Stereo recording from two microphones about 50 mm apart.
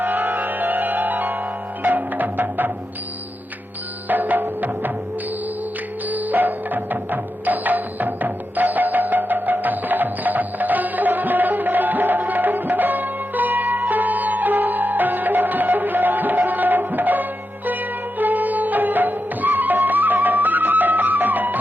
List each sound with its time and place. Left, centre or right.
0.0 s music: right
4.1 s music: right
6.1 s music: right